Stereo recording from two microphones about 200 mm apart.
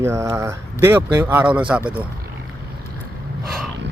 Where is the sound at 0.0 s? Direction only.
15° right (ahead or behind).